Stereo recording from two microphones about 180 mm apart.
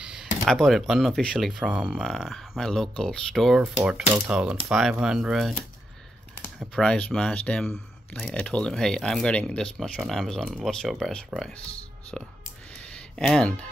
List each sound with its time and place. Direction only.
0.0 s speech: centre (ahead or behind)
6.7 s speech: 5° left (ahead or behind)
13.3 s speech: 5° left (ahead or behind)